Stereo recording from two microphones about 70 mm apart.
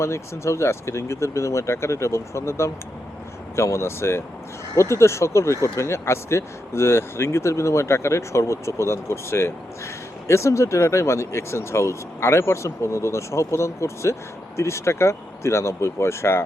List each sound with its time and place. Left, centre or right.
0.0 s speech: left